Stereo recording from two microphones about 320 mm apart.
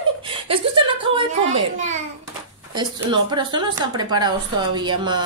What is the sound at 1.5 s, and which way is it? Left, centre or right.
A child's voice, right.